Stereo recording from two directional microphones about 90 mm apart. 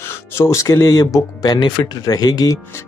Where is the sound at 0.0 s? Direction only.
30° left (ahead or behind).